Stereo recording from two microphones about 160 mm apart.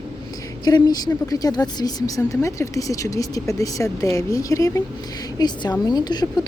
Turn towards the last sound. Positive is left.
turn(degrees=25)  # may be behind; listen again after turning